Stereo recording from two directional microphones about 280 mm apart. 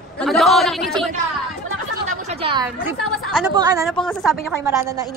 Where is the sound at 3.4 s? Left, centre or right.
Centre.